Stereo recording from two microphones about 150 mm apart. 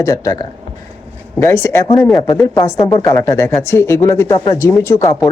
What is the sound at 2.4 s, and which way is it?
A man's voice, 15° left (ahead or behind).